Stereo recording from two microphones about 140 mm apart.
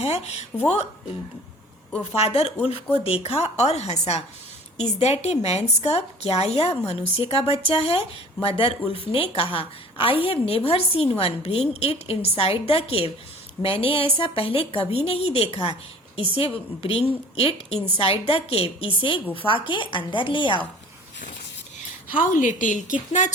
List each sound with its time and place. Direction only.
0.0 s speech: 50° left (ahead or behind)
2.1 s a woman's voice: 45° left (ahead or behind)
22.2 s a woman's voice: 70° left (ahead or behind)